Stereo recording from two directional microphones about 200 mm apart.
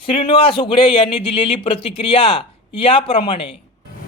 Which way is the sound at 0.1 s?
25° left (ahead or behind).